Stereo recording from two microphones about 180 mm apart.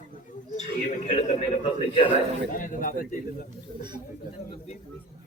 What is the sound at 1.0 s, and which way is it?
A man's voice, 40° left (ahead or behind).